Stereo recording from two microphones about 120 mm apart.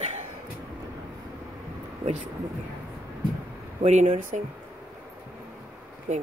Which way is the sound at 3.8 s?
80° right.